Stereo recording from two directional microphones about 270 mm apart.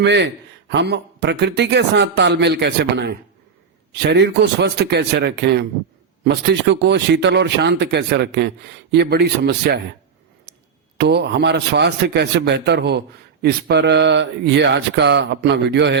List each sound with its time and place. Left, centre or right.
0.0 s speech: right
10.9 s speech: right